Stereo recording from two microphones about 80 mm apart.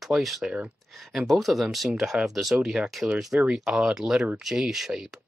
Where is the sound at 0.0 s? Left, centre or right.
Centre.